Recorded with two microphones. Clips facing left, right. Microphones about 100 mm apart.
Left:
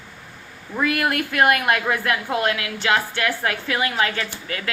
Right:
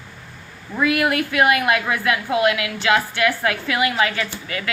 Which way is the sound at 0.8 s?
45° left (ahead or behind).